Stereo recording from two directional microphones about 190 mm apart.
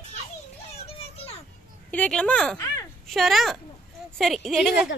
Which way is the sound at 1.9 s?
5° left (ahead or behind).